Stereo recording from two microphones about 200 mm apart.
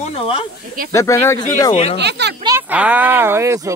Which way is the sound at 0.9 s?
15° left (ahead or behind).